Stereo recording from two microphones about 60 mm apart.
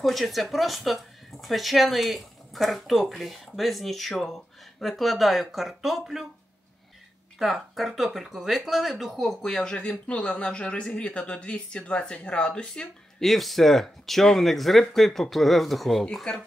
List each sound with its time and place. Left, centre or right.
0.0 s speech: centre
7.3 s speech: centre
9.5 s speech: centre
13.2 s speech: centre